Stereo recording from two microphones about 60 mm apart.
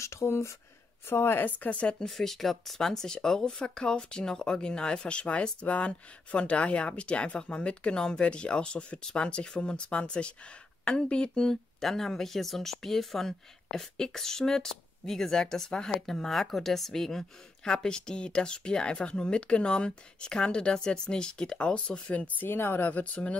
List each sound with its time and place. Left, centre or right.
0.0 s speech: left
1.0 s speech: left; by 2.0 s centre
2.0 s speech: centre; by 22.5 s left
22.5 s speech: left